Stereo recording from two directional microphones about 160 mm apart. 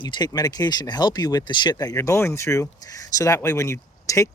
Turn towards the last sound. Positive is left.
turn(degrees=20)  # may be behind; listen again after turning